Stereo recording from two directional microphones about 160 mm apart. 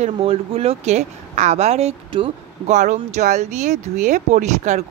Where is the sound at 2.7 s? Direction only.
50° right (ahead or behind).